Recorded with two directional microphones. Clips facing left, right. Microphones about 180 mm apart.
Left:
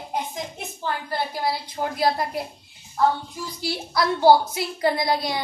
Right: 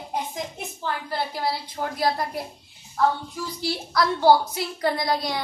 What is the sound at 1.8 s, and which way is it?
Speech, 20° left (ahead or behind).